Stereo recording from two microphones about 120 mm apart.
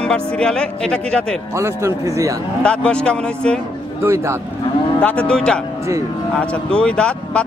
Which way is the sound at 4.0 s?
20° right (ahead or behind).